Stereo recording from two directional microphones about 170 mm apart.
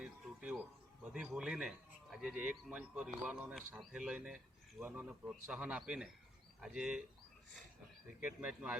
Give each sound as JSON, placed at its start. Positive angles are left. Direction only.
{"t": 0.0, "sound": "a sound", "side_deg": -5}
{"t": 1.0, "sound": "speech", "side_deg": -5}
{"t": 8.2, "sound": "speech", "side_deg": -5}